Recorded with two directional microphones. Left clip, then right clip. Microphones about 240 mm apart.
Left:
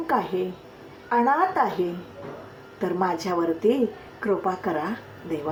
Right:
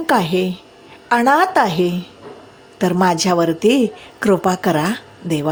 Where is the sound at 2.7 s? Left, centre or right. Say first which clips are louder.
Right 9 dB; right.